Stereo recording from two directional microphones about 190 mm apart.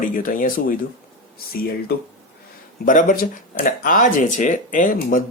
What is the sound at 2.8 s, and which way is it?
Speech, 45° left (ahead or behind).